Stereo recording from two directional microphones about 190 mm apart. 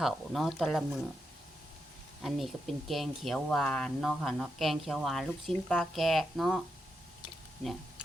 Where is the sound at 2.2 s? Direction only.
Centre (ahead or behind).